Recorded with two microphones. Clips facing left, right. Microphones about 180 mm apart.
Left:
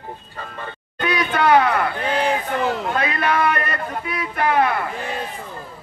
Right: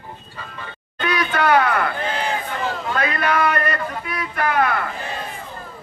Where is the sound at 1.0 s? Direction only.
25° left (ahead or behind).